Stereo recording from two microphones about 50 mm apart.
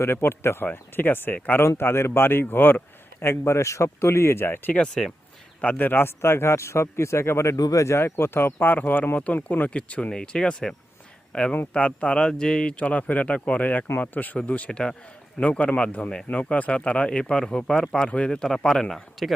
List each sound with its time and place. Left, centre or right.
0.0 s speech: left
0.6 s speech: left
1.5 s speech: left
5.0 s speech: centre
5.5 s speech: left
5.9 s speech: left
14.7 s speech: centre
18.3 s speech: centre